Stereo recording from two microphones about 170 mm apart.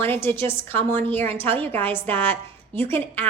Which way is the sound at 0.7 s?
35° right (ahead or behind).